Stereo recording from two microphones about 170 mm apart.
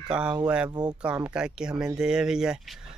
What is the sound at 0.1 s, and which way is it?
Speech, 5° right (ahead or behind).